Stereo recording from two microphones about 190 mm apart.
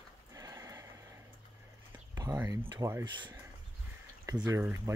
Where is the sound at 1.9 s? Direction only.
15° right (ahead or behind).